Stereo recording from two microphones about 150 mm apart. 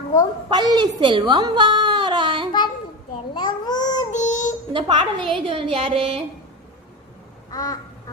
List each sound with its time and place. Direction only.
0.5 s a woman's voice: 30° right (ahead or behind)
3.3 s a child's voice: 30° left (ahead or behind)
4.1 s synthetic singing: 55° left (ahead or behind)
4.7 s a woman's voice: 30° right (ahead or behind)
7.5 s duck: 25° left (ahead or behind)